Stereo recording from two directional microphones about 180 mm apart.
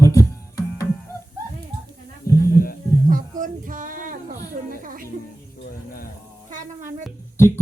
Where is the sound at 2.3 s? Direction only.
15° left (ahead or behind).